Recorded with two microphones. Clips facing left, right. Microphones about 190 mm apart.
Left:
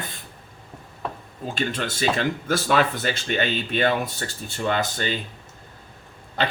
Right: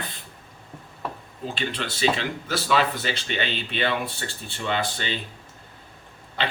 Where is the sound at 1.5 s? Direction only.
45° left (ahead or behind).